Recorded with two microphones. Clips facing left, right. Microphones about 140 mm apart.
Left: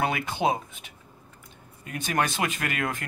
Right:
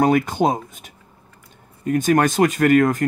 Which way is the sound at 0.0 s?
45° right (ahead or behind).